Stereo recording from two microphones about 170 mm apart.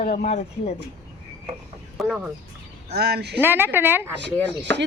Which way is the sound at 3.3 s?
10° right (ahead or behind).